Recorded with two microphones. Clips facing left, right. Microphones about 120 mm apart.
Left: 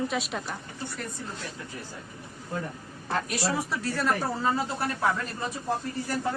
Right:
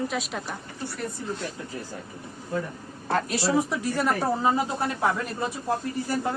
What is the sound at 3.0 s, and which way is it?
Speech, 40° right (ahead or behind).